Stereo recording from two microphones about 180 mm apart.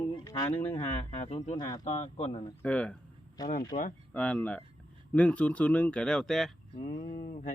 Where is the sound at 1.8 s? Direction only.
40° left (ahead or behind).